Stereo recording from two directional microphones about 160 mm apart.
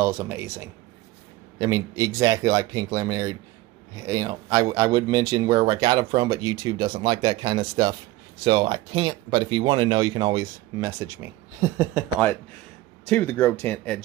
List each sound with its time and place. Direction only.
0.0 s speech: 15° right (ahead or behind)
13.0 s speech: 10° left (ahead or behind)